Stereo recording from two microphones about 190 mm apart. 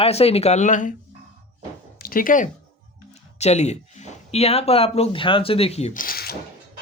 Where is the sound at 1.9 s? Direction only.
50° left (ahead or behind).